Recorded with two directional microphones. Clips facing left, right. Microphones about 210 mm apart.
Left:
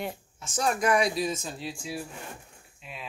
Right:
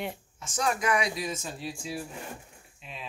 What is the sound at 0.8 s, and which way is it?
Speech, 35° left (ahead or behind).